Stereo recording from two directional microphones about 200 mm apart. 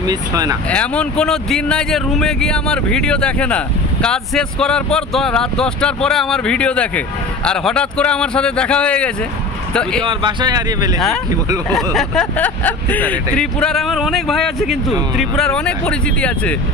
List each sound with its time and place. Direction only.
0.0 s speech: 20° right (ahead or behind)
0.7 s speech: 5° left (ahead or behind)
10.0 s speech: 20° right (ahead or behind)
11.7 s speech: centre (ahead or behind)